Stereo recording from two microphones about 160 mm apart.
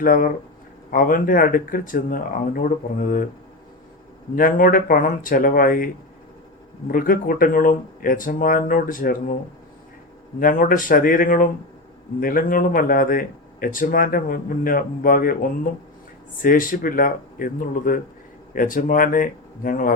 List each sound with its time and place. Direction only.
0.0 s speech: 60° left (ahead or behind)
4.4 s speech: 60° left (ahead or behind)
10.4 s speech: 60° left (ahead or behind)